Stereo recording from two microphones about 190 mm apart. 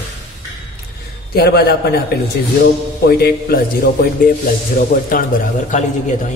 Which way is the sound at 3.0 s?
55° left (ahead or behind).